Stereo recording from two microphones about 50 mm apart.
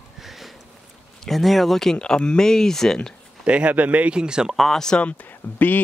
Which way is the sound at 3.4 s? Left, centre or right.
Right.